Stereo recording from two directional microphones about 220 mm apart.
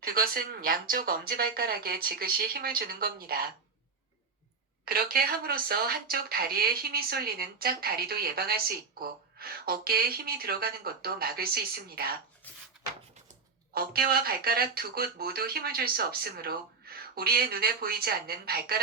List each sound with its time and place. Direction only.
0.0 s a woman's voice: 40° right (ahead or behind)
4.9 s a woman's voice: 40° right (ahead or behind)
13.7 s a woman's voice: 45° right (ahead or behind)